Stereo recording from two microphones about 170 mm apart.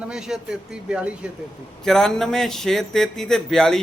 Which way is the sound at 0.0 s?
5° right (ahead or behind).